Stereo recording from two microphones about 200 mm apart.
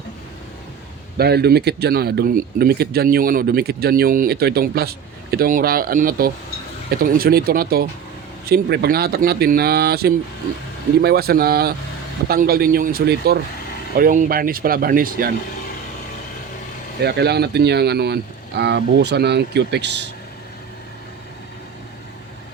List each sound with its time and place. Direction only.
1.2 s speech: 55° right (ahead or behind)
17.0 s speech: 55° right (ahead or behind)